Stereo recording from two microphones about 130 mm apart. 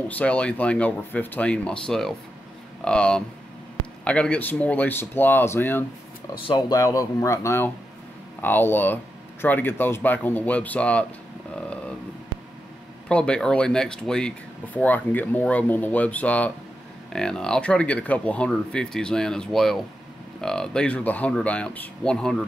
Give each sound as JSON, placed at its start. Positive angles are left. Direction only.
{"t": 0.1, "sound": "speech", "side_deg": 10}
{"t": 6.4, "sound": "speech", "side_deg": 30}
{"t": 13.1, "sound": "speech", "side_deg": 5}